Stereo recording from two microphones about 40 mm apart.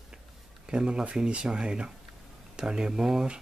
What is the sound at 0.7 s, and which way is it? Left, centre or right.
Speech, centre.